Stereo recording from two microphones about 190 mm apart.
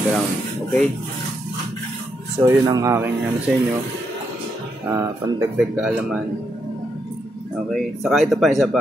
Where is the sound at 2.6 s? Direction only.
15° right (ahead or behind).